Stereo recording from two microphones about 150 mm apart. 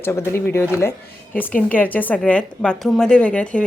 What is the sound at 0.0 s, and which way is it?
Speech, 15° left (ahead or behind).